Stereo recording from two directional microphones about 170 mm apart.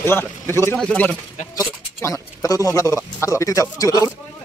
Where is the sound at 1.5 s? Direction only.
15° left (ahead or behind).